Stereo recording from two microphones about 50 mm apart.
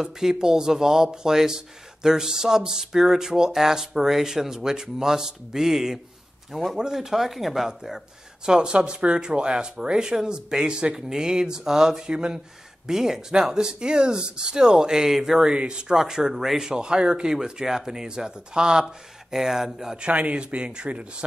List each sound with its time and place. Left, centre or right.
0.0 s speech: centre
16.0 s speech: centre
20.1 s speech: right